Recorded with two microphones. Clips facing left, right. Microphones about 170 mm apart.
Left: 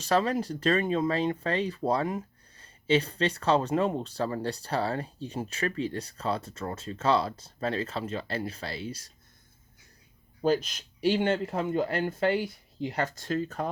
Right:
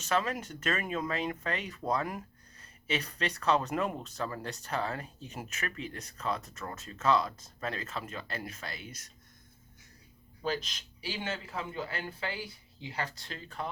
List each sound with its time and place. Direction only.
0.0 s speech: 35° left (ahead or behind)
10.4 s speech: 45° left (ahead or behind)